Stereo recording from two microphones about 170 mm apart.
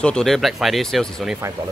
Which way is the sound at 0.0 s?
5° left (ahead or behind).